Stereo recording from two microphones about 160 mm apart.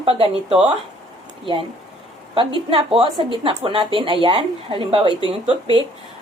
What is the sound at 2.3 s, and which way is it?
A woman's voice, 30° right (ahead or behind).